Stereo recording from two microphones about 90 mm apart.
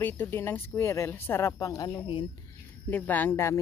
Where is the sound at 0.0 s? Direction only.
25° left (ahead or behind).